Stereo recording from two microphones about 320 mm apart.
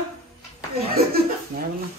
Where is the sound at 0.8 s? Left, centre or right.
Right.